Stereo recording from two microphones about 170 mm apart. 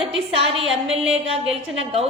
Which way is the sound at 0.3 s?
35° right (ahead or behind).